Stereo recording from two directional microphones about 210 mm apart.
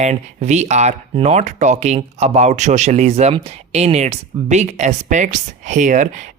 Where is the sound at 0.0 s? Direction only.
35° right (ahead or behind).